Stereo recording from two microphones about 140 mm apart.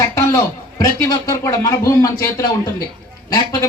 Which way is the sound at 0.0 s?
20° left (ahead or behind).